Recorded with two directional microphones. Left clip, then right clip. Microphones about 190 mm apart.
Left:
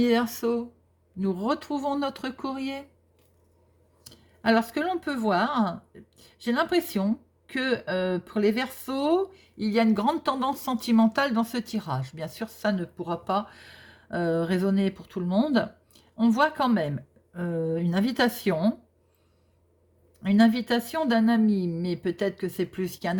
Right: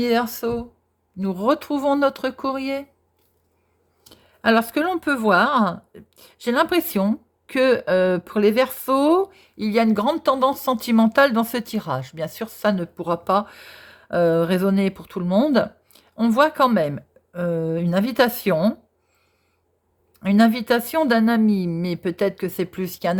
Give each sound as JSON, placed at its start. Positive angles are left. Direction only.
{"t": 0.0, "sound": "speech", "side_deg": -25}
{"t": 4.1, "sound": "speech", "side_deg": -30}
{"t": 20.1, "sound": "speech", "side_deg": -35}